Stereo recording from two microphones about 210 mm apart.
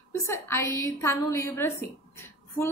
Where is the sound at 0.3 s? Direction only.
10° left (ahead or behind).